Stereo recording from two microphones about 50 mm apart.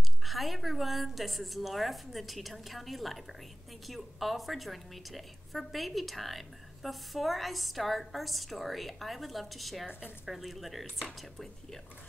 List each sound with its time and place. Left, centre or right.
0.2 s a woman's voice: centre